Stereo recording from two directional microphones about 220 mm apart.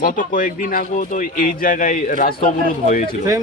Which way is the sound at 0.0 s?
40° left (ahead or behind).